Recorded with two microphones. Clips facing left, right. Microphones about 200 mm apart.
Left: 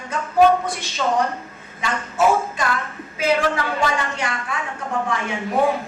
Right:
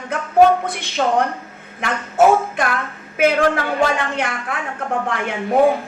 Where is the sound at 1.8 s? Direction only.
55° right (ahead or behind).